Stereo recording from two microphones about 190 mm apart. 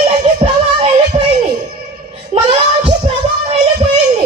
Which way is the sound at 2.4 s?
30° right (ahead or behind).